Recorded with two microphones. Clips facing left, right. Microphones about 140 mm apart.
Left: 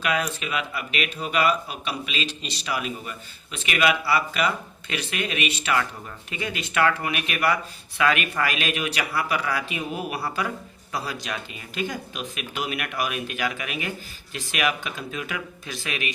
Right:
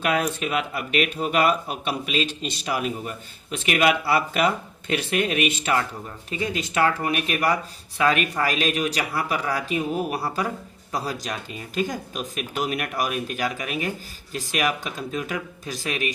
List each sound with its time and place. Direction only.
0.0 s speech: 50° right (ahead or behind)